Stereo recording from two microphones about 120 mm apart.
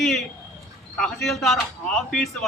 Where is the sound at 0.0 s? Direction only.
Centre (ahead or behind).